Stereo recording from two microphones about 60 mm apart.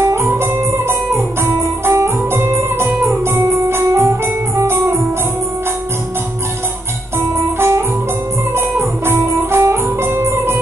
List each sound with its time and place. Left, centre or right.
0.0 s guitar: right
3.0 s music: right
7.2 s guitar: right
8.5 s music: right